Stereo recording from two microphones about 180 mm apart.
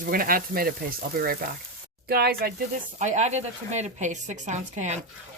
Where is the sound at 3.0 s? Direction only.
40° right (ahead or behind).